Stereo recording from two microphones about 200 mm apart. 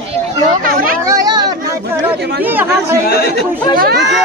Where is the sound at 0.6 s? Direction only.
45° right (ahead or behind).